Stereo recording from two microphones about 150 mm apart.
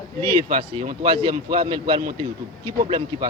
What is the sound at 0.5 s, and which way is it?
Speech, 40° right (ahead or behind).